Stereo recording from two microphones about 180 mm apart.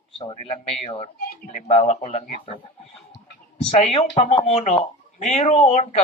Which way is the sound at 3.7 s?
35° left (ahead or behind).